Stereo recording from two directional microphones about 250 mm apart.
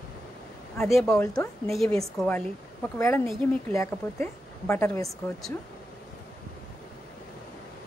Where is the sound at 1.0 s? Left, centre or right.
Centre.